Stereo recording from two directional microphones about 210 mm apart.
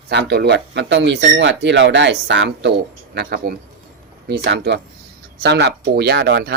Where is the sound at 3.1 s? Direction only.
50° right (ahead or behind).